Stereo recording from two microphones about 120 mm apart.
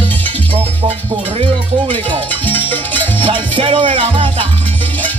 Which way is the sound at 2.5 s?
15° left (ahead or behind).